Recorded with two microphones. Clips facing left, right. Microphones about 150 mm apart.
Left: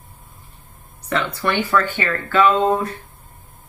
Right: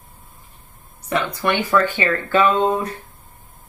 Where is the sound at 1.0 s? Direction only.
20° right (ahead or behind).